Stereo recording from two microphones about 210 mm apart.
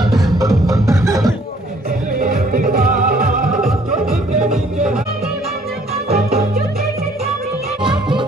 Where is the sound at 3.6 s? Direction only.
Centre (ahead or behind).